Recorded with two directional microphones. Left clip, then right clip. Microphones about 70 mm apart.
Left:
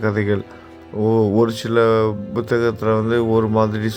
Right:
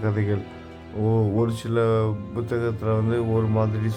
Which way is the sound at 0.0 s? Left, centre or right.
Left.